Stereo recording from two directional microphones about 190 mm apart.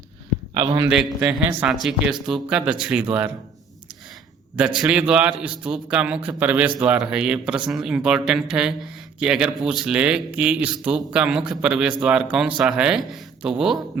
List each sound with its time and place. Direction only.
0.5 s a man's voice: 25° right (ahead or behind)
1.2 s a man's voice: 10° right (ahead or behind)
4.8 s a man's voice: 5° right (ahead or behind)